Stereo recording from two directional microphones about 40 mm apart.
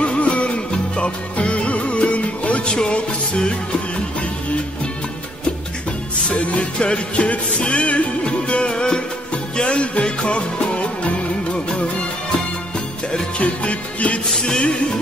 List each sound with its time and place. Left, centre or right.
0.0 s music: left
2.6 s music: left
6.2 s music: left
13.4 s music: left
14.4 s music: left